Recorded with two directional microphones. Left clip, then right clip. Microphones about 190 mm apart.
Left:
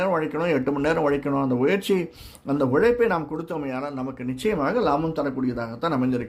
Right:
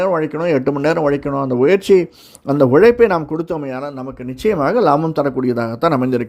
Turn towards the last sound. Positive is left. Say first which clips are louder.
# right 9 dB
turn(degrees=-40)  # may be behind; listen again after turning